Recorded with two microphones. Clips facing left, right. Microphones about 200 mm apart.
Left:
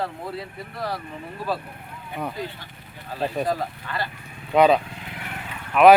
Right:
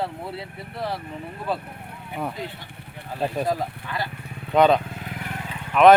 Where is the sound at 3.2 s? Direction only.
Centre (ahead or behind).